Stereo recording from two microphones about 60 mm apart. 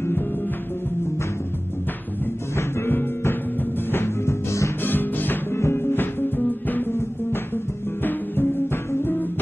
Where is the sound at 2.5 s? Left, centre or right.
Left.